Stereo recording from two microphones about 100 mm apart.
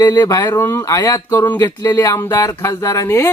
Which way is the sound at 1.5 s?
35° left (ahead or behind).